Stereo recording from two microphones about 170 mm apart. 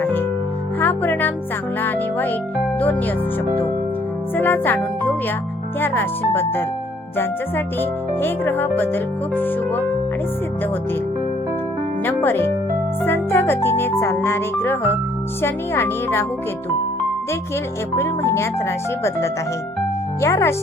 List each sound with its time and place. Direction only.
0.0 s music: 10° left (ahead or behind)
1.8 s speech: 10° left (ahead or behind)
4.4 s speech: 10° left (ahead or behind)
12.0 s speech: 10° left (ahead or behind)
17.9 s speech: 15° left (ahead or behind)
20.2 s speech: 15° left (ahead or behind)